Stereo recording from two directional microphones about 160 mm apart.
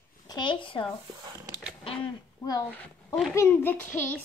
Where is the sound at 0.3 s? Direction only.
30° left (ahead or behind).